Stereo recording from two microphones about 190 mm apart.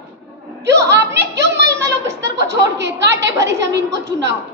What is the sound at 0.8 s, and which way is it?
A child's voice, 65° right (ahead or behind).